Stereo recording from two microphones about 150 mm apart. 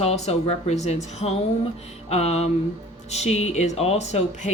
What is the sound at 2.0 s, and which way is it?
A woman's voice, 45° left (ahead or behind).